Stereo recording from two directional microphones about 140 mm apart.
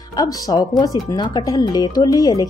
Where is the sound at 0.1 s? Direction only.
25° left (ahead or behind).